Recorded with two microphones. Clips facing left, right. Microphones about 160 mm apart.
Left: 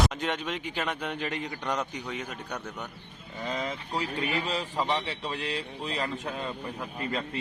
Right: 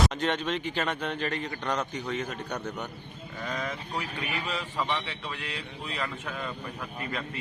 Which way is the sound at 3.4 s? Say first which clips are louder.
Left 1 dB; 25° left (ahead or behind).